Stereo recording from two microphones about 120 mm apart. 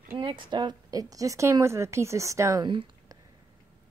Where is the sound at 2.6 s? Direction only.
40° right (ahead or behind).